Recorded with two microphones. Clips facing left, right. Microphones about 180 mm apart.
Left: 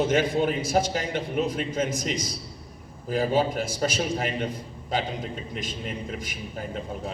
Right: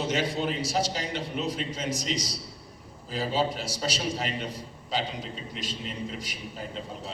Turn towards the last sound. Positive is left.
turn(degrees=50)  # may be behind; listen again after turning